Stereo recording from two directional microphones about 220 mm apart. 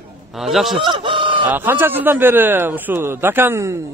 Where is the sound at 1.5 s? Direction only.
10° right (ahead or behind).